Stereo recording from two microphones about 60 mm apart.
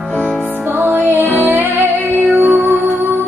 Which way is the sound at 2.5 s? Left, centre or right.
Right.